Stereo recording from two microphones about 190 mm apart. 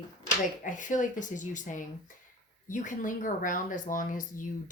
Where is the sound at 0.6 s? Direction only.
40° left (ahead or behind).